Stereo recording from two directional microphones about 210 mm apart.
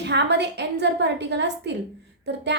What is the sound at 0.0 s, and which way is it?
A woman's voice, 55° right (ahead or behind).